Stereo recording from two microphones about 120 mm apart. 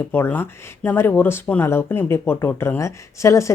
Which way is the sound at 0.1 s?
15° left (ahead or behind).